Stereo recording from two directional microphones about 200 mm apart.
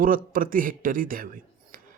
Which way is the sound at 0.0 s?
45° right (ahead or behind).